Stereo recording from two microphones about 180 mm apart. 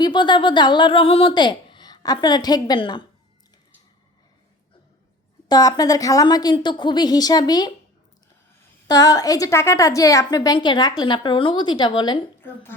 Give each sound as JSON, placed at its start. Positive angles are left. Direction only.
{"t": 0.0, "sound": "a woman's voice", "side_deg": 25}
{"t": 5.5, "sound": "a woman's voice", "side_deg": 20}
{"t": 8.9, "sound": "a woman's voice", "side_deg": 20}
{"t": 12.4, "sound": "a woman's voice", "side_deg": 10}